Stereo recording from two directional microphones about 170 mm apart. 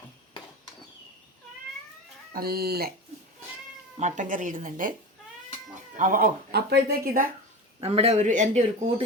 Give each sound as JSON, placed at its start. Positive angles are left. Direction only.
{"t": 2.3, "sound": "speech", "side_deg": -65}
{"t": 4.0, "sound": "speech", "side_deg": -45}
{"t": 6.0, "sound": "speech", "side_deg": -55}
{"t": 7.8, "sound": "a man's voice", "side_deg": -35}